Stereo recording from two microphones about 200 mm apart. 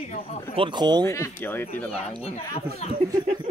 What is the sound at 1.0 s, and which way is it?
Speech, 15° left (ahead or behind).